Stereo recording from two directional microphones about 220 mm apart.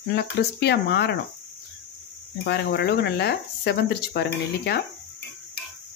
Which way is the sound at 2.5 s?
50° left (ahead or behind).